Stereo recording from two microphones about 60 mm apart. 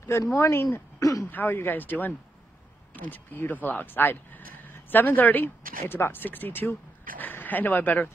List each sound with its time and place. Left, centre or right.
0.3 s speech: left
0.9 s throat clearing: left
1.3 s speech: left